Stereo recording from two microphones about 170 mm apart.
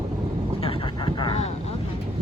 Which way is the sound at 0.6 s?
30° left (ahead or behind).